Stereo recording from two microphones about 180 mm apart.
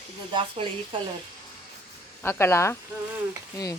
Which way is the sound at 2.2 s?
15° left (ahead or behind).